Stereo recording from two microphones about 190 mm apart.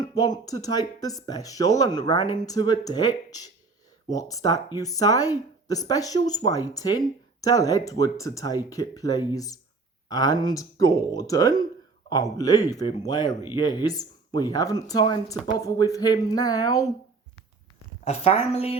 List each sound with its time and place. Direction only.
0.0 s speech: 20° left (ahead or behind)
18.0 s a woman's voice: 35° left (ahead or behind)